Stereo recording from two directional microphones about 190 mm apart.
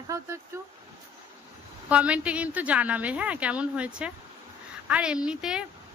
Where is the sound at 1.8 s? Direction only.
5° right (ahead or behind).